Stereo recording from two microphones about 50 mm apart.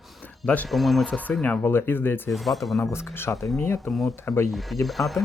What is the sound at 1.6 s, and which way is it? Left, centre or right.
Speech, left.